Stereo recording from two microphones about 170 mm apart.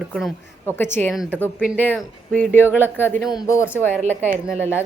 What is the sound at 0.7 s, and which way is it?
Speech, 15° left (ahead or behind).